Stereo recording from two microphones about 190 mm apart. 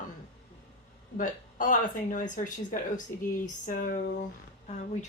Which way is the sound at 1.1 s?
45° left (ahead or behind).